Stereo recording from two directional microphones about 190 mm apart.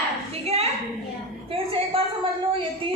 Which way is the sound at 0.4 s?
35° right (ahead or behind).